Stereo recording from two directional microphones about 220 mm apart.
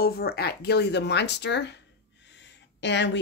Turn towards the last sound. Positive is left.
turn(degrees=55)  # may be behind; listen again after turning